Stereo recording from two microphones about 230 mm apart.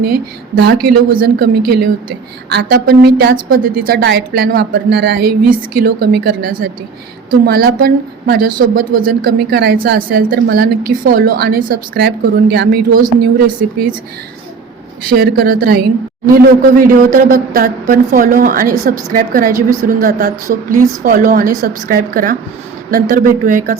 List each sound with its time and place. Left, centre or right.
0.1 s a woman's voice: right
2.5 s a woman's voice: right
15.1 s a woman's voice: right